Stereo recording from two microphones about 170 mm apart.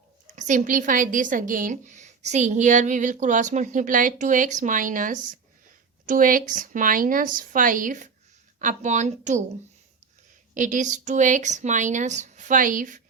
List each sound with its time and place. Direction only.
0.3 s a woman's voice: 45° right (ahead or behind)
10.5 s a woman's voice: 50° right (ahead or behind)